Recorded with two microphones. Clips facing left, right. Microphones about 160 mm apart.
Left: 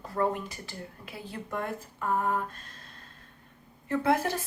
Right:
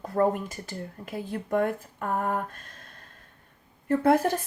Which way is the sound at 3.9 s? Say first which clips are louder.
Right 5 dB; 50° right (ahead or behind).